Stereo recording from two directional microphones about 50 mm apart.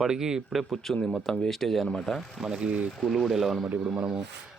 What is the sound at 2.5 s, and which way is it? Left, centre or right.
Speech, right.